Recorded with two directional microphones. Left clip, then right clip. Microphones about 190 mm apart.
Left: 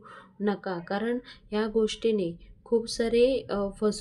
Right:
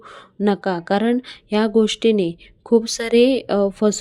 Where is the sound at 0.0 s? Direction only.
45° right (ahead or behind).